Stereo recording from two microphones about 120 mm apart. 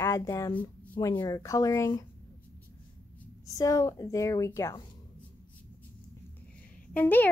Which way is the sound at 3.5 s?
30° left (ahead or behind).